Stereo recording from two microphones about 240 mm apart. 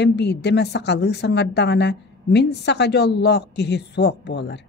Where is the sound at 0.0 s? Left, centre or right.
Left.